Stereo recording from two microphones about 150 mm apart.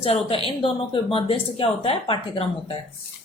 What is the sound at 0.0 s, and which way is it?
A woman's voice, 40° left (ahead or behind).